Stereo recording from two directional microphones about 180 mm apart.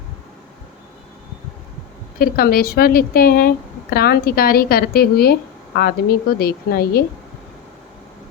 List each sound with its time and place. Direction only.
2.1 s a woman's voice: 55° left (ahead or behind)